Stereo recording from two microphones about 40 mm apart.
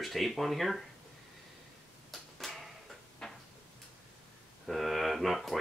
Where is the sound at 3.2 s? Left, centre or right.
Centre.